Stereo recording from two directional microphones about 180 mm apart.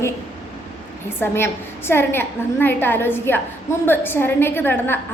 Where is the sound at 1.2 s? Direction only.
15° left (ahead or behind).